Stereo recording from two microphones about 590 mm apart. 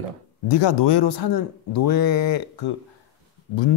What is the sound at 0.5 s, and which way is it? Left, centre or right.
A woman's voice, left.